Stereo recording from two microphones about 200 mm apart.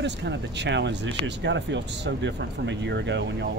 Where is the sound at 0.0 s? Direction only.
60° right (ahead or behind).